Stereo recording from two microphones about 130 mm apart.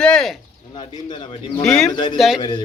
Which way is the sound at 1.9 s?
35° left (ahead or behind).